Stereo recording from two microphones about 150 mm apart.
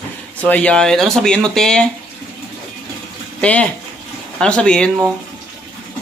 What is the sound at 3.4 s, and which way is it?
Speech, 10° left (ahead or behind).